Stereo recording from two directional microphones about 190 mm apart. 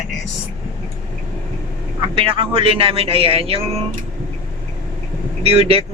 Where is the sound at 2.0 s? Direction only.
30° right (ahead or behind).